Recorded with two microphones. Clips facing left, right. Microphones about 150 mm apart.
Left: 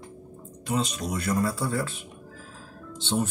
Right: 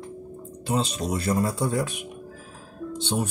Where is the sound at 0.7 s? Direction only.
30° right (ahead or behind).